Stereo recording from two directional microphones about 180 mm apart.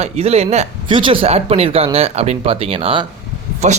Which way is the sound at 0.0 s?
35° right (ahead or behind).